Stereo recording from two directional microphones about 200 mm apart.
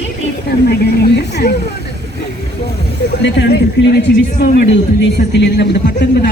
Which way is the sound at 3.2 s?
60° left (ahead or behind).